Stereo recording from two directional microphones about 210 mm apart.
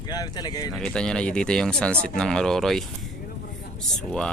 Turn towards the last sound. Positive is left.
turn(degrees=5)  # may be behind; listen again after turning